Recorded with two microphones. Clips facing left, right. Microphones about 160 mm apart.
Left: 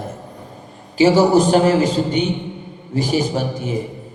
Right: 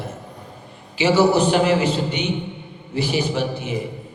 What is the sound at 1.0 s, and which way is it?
A man's voice, 40° left (ahead or behind).